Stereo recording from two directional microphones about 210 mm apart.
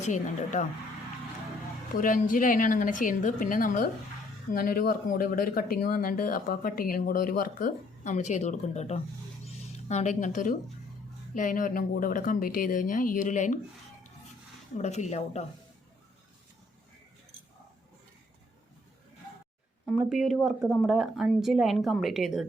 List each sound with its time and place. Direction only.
0.0 s speech: 35° left (ahead or behind)
2.0 s speech: 40° left (ahead or behind)
14.8 s speech: 35° left (ahead or behind)
19.8 s speech: centre (ahead or behind)